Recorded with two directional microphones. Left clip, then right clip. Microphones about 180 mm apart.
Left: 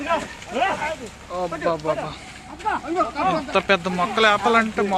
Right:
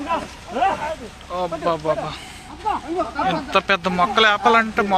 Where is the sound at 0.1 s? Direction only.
10° left (ahead or behind).